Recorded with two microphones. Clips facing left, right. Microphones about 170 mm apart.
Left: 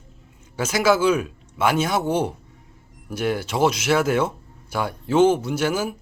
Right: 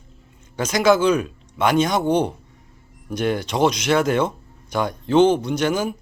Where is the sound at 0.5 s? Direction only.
5° left (ahead or behind).